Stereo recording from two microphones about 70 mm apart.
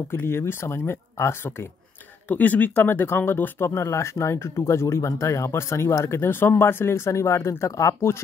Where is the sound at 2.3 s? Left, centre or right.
Left.